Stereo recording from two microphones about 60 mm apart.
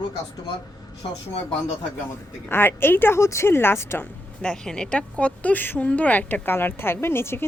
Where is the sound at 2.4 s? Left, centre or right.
Left.